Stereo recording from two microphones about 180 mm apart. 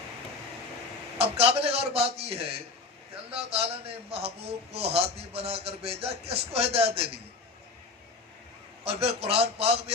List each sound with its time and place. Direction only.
1.2 s a man's voice: 35° right (ahead or behind)
8.8 s a man's voice: 35° right (ahead or behind)